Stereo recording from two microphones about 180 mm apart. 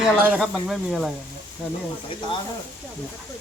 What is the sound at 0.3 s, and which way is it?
Speech, centre (ahead or behind).